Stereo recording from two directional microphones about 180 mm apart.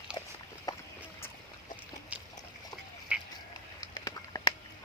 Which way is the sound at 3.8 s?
20° left (ahead or behind).